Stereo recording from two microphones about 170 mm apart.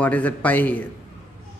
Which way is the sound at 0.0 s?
10° left (ahead or behind).